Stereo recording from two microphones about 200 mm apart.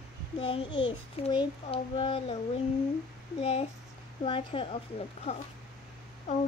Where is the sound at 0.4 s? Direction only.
25° left (ahead or behind).